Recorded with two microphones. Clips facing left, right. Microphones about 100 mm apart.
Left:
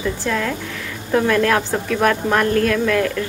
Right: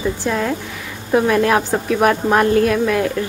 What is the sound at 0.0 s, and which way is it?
A woman's voice, 20° right (ahead or behind).